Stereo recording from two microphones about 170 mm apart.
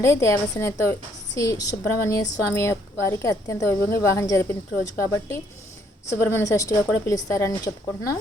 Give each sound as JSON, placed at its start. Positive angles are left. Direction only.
{"t": 0.0, "sound": "speech", "side_deg": 20}